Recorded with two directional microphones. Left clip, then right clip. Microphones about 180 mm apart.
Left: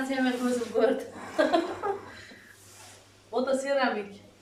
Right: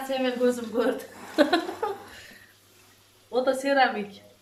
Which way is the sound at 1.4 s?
Centre (ahead or behind).